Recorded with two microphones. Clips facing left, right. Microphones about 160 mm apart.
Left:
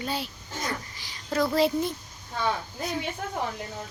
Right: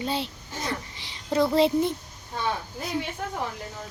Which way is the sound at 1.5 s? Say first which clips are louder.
Right 3 dB; 25° right (ahead or behind).